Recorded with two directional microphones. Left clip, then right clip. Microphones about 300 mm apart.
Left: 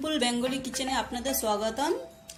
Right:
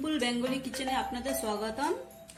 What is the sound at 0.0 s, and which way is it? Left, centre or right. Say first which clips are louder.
A woman's voice: left 3 dB; centre.